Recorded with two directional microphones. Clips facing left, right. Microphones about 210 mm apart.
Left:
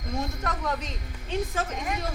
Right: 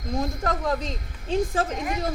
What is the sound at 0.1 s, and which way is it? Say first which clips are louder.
A woman's voice: right 5 dB; 30° right (ahead or behind).